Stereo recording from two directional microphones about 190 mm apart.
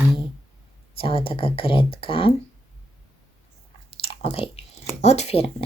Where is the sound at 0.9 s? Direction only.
30° left (ahead or behind).